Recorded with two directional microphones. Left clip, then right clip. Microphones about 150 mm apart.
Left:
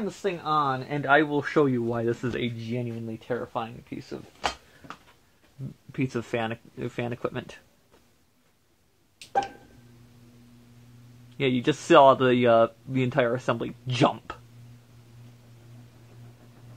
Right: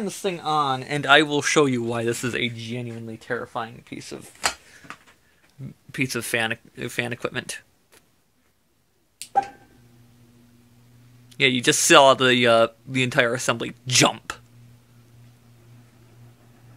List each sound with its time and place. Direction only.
0.0 s speech: 45° right (ahead or behind)
1.9 s speech: 25° right (ahead or behind)
4.8 s a sound: 10° right (ahead or behind)
6.0 s speech: 10° right (ahead or behind)
11.3 s speech: 20° right (ahead or behind)